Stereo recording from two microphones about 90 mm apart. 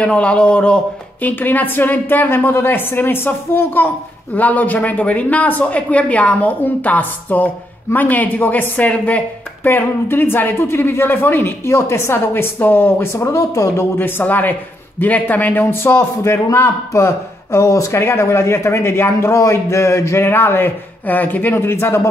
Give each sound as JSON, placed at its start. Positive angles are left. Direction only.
{"t": 0.0, "sound": "a man's voice", "side_deg": 10}
{"t": 13.9, "sound": "a woman's voice", "side_deg": 25}